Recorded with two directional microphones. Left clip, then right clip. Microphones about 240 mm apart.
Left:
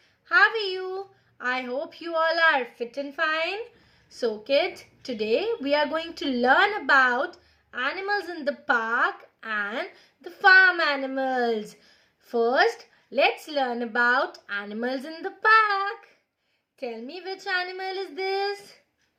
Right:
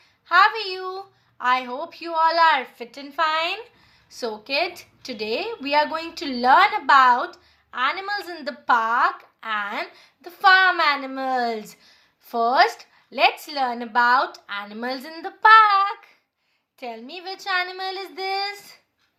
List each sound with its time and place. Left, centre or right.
0.3 s a woman's voice: centre
1.6 s speech: right
2.1 s a woman's voice: centre